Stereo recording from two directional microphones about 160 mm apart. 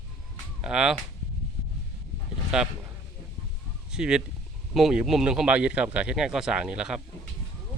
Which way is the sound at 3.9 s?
5° right (ahead or behind).